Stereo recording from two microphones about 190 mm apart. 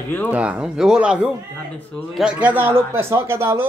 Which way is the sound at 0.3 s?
5° right (ahead or behind).